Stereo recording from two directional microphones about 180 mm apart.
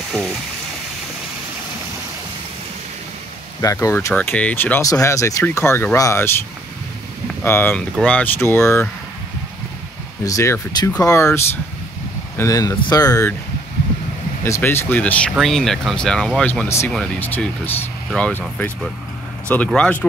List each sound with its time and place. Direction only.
3.6 s speech: 15° left (ahead or behind)
7.4 s speech: 10° left (ahead or behind)
10.2 s speech: 15° left (ahead or behind)
14.4 s speech: 15° left (ahead or behind)